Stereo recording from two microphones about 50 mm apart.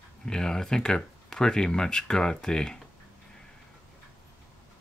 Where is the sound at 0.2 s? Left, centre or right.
Centre.